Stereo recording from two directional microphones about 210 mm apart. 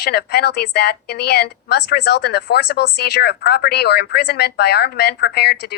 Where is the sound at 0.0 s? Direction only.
50° left (ahead or behind).